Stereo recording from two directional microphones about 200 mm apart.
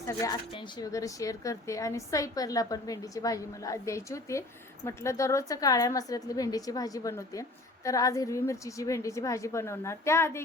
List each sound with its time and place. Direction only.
0.1 s speech: 15° left (ahead or behind)